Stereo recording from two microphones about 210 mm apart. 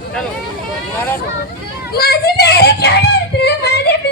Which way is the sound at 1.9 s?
45° left (ahead or behind).